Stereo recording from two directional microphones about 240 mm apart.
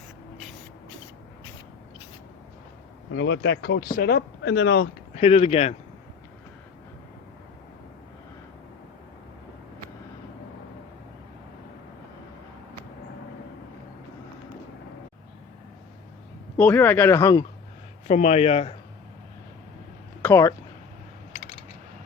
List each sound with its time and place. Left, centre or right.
3.2 s speech: left
5.1 s speech: left
16.6 s speech: centre
18.1 s speech: left
20.2 s speech: centre